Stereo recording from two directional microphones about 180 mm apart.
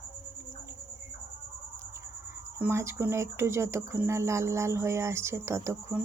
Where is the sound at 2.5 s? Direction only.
15° right (ahead or behind).